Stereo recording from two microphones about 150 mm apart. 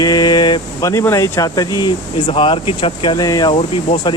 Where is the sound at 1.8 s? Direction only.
35° left (ahead or behind).